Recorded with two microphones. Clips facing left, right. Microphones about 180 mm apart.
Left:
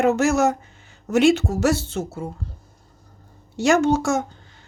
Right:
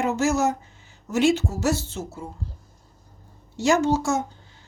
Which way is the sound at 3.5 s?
65° left (ahead or behind).